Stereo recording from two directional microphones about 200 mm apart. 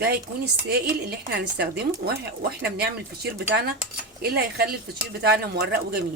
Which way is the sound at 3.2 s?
55° right (ahead or behind).